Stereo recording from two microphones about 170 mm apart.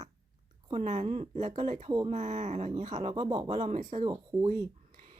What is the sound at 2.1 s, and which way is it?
Speech, 45° right (ahead or behind).